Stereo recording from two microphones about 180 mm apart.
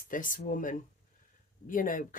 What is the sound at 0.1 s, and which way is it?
Speech, 50° left (ahead or behind).